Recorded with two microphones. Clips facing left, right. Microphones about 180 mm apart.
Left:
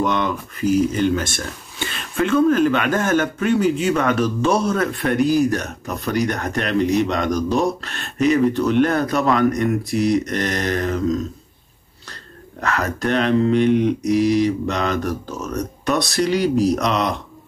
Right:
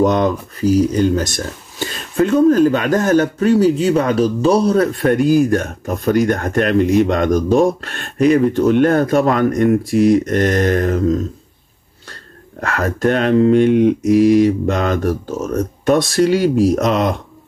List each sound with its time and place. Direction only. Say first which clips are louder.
0.0 s speech: right 6 dB; 40° right (ahead or behind)
12.5 s speech: right 3 dB; 45° right (ahead or behind)